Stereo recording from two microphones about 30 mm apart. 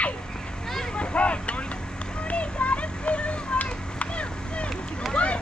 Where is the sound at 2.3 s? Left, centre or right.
Left.